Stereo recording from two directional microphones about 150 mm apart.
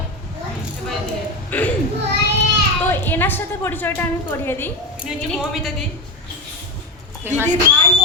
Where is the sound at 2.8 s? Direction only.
15° left (ahead or behind).